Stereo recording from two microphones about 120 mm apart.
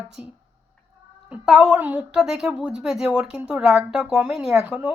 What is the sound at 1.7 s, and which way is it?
Speech, 15° right (ahead or behind).